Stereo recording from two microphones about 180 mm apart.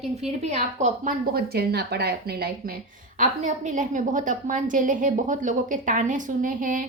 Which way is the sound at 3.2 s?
45° right (ahead or behind).